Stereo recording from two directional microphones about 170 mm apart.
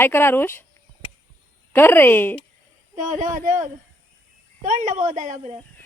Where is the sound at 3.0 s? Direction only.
50° right (ahead or behind).